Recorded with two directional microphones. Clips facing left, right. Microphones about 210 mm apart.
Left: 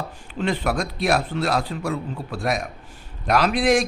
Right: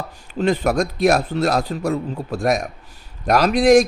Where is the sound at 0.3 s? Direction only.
40° right (ahead or behind).